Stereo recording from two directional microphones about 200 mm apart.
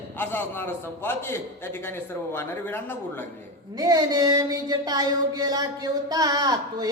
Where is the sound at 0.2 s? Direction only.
10° left (ahead or behind).